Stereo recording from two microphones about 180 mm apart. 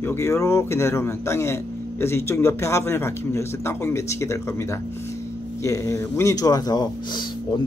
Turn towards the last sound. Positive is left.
turn(degrees=25)  # may be behind; listen again after turning